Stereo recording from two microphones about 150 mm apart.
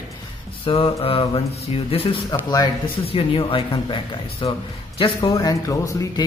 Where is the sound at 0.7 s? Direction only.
40° left (ahead or behind).